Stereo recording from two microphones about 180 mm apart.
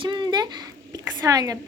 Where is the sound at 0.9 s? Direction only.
20° right (ahead or behind).